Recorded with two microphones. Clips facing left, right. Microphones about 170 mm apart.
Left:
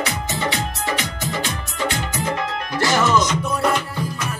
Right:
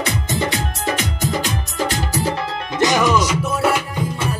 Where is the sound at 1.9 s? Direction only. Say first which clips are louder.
Right 3 dB; 35° right (ahead or behind).